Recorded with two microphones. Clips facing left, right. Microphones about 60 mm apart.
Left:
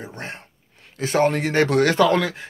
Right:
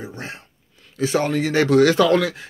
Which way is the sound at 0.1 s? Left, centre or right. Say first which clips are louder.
Even; left.